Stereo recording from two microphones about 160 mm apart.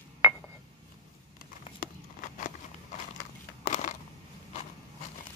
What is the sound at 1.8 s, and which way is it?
Walk, 55° left (ahead or behind).